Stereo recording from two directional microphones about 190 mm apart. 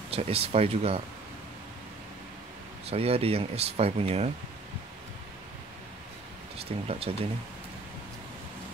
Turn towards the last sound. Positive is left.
turn(degrees=-30)  # may be behind; listen again after turning